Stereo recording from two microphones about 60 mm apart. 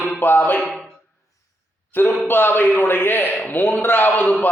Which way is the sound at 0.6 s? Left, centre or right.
Centre.